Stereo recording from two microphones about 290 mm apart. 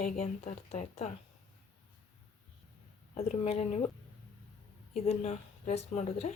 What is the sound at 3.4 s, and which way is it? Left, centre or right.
Speech, left.